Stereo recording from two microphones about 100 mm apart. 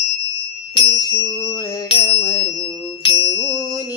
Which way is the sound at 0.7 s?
55° left (ahead or behind).